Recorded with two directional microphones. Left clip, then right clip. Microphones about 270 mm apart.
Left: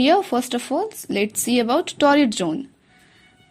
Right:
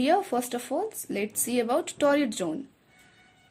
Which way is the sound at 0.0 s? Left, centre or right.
Centre.